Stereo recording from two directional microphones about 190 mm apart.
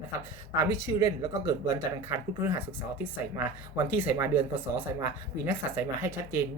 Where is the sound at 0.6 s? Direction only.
15° right (ahead or behind).